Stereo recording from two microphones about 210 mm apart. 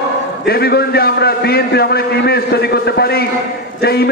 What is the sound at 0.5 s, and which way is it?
A man's voice, 50° left (ahead or behind).